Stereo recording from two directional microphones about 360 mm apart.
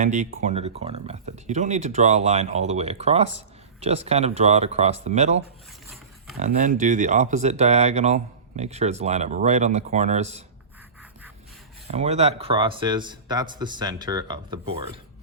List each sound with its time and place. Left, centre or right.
0.0 s speech: centre
6.4 s speech: right
11.9 s speech: centre